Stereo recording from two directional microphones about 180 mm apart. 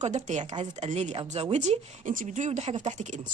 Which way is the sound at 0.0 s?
40° right (ahead or behind).